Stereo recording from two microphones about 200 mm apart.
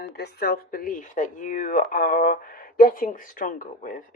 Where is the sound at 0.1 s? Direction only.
50° left (ahead or behind).